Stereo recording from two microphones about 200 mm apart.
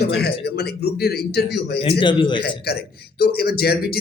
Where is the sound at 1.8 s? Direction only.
25° left (ahead or behind).